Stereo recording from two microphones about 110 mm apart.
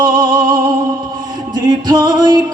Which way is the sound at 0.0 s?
45° right (ahead or behind).